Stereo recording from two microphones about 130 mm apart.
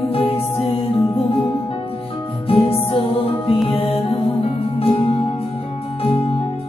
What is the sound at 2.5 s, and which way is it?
Music, 45° left (ahead or behind).